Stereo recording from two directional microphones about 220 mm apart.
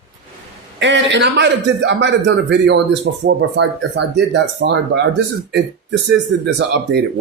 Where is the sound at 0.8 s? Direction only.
55° right (ahead or behind).